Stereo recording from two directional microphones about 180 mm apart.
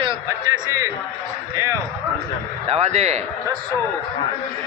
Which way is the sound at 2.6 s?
35° right (ahead or behind).